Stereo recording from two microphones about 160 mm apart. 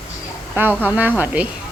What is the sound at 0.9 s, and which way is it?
Speech, 10° right (ahead or behind).